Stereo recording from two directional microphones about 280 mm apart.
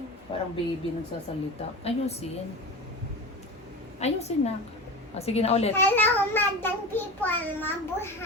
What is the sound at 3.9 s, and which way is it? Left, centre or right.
A woman's voice, left.